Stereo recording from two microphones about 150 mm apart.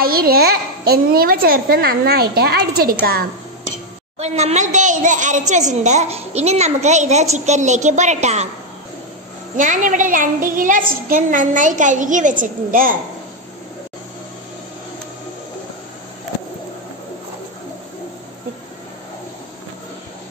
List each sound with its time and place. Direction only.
0.0 s a child's voice: 90° right
4.2 s a woman's voice: 45° right (ahead or behind)
9.6 s a woman's voice: 60° right (ahead or behind)